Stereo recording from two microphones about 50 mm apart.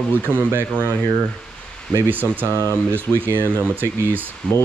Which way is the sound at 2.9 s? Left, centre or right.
Right.